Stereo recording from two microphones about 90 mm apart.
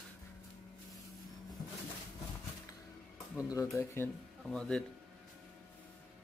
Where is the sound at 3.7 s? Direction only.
25° left (ahead or behind).